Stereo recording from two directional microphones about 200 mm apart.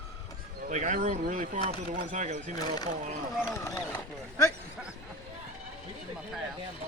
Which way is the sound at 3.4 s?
15° left (ahead or behind).